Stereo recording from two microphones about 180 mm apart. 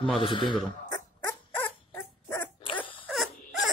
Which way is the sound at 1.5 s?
10° left (ahead or behind).